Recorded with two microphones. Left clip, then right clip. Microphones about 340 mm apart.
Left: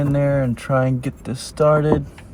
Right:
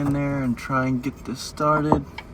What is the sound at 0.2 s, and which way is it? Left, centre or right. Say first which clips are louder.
Speech: left 7 dB; left.